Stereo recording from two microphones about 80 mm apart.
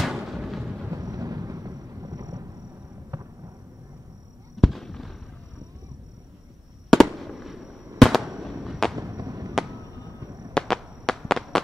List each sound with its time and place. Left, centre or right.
0.0 s music: centre
0.9 s thunder: right
3.1 s fireworks: right
4.6 s fireworks: centre
6.9 s fireworks: centre
8.9 s a sound: right
10.5 s fireworks: centre